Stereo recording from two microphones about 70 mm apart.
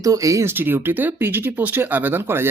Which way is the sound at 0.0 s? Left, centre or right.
Right.